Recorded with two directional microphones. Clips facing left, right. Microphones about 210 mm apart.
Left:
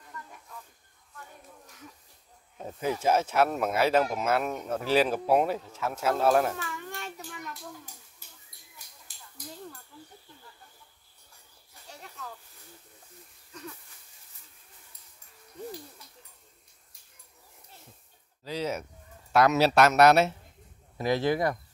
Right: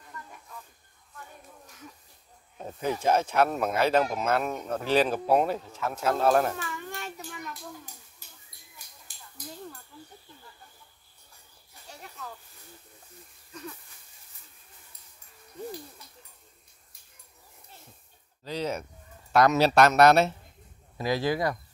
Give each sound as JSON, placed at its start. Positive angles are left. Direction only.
{"t": 2.8, "sound": "speech", "side_deg": 5}
{"t": 18.4, "sound": "a sound", "side_deg": 5}
{"t": 19.3, "sound": "speech", "side_deg": 5}
{"t": 21.0, "sound": "speech", "side_deg": 20}